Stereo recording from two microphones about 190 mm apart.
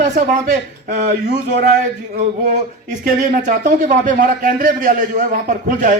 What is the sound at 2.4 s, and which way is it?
Speech, 40° right (ahead or behind).